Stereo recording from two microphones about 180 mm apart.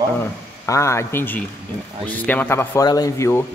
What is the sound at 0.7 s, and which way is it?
Speech, 15° left (ahead or behind).